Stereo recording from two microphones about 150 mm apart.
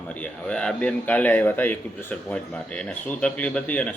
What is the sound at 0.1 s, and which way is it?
A man's voice, 5° left (ahead or behind).